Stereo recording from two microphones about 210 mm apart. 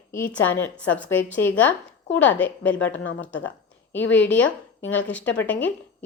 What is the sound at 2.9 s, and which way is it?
Speech, 60° left (ahead or behind).